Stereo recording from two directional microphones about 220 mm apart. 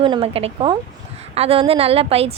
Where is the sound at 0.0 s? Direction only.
25° right (ahead or behind).